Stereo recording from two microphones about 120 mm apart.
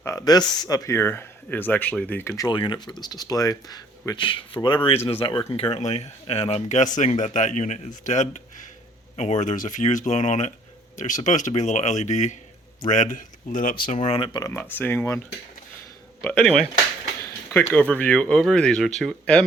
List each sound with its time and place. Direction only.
0.0 s speech: 25° left (ahead or behind)
2.5 s speech: 40° left (ahead or behind); by 8.6 s 90° left
9.1 s speech: 70° left (ahead or behind)
12.9 s speech: 90° left; by 14.3 s 60° left (ahead or behind)
14.3 s speech: 25° left (ahead or behind)
14.6 s speech: 15° left (ahead or behind)
16.4 s speech: 5° left (ahead or behind)
17.5 s speech: 20° left (ahead or behind)